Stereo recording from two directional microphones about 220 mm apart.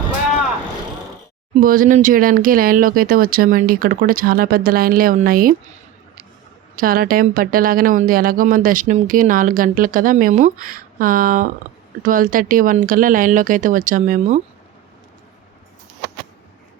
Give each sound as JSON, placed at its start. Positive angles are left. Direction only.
{"t": 1.5, "sound": "a woman's voice", "side_deg": -40}
{"t": 6.7, "sound": "a woman's voice", "side_deg": -40}